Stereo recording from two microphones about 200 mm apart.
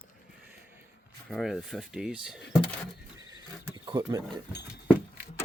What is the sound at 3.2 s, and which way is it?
Cricket, 20° right (ahead or behind).